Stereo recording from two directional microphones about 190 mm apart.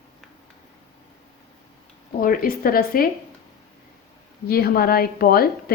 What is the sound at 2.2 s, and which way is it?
Speech, 50° left (ahead or behind).